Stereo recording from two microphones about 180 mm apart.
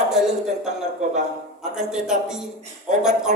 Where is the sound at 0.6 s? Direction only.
40° right (ahead or behind).